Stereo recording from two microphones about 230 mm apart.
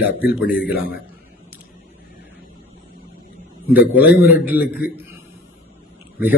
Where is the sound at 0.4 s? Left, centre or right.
Left.